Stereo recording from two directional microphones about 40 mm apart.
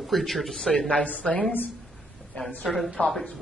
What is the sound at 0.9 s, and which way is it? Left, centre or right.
A woman's voice, left.